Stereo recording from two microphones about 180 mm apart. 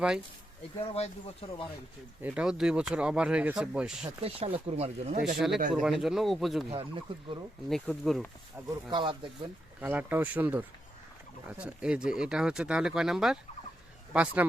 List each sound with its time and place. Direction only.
0.8 s speech: 35° left (ahead or behind)
2.2 s speech: 5° right (ahead or behind)
4.0 s speech: 35° right (ahead or behind)
5.7 s speech: centre (ahead or behind)
6.7 s speech: 30° right (ahead or behind)
7.7 s speech: centre (ahead or behind)
8.6 s speech: 15° right (ahead or behind)
8.9 s speech: 25° right (ahead or behind)
9.8 s speech: 10° right (ahead or behind)